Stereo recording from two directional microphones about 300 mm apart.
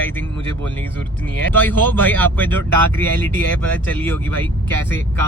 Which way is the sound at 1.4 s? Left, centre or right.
Centre.